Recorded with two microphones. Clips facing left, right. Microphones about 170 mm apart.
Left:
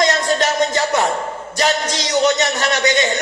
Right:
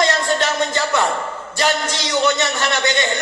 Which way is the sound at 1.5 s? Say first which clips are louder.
Left 1 dB; 45° left (ahead or behind).